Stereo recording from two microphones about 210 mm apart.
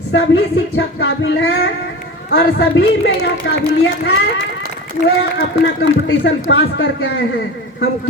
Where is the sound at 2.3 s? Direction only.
50° left (ahead or behind).